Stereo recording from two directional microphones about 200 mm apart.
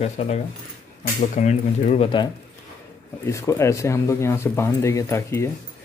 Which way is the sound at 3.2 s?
15° left (ahead or behind).